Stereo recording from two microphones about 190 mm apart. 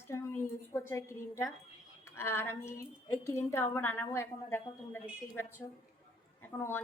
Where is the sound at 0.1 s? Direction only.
15° left (ahead or behind).